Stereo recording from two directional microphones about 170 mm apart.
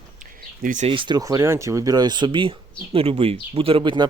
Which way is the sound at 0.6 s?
50° right (ahead or behind).